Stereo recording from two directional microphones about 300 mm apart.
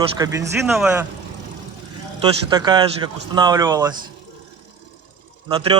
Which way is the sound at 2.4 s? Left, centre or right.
Centre.